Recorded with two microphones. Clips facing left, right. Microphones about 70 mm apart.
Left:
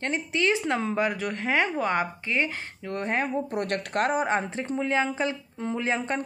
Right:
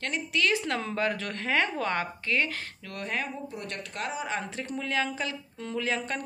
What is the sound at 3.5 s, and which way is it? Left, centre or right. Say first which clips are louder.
Speech: left 10 dB; left.